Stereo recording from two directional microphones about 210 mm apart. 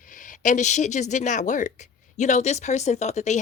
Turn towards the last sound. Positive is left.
turn(degrees=30)  # may be behind; listen again after turning